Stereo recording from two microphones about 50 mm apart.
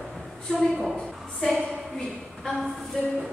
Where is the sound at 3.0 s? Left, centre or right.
Centre.